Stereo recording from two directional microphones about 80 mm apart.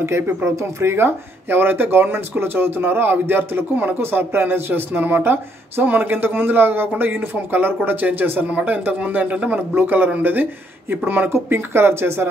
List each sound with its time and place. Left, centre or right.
0.0 s speech: right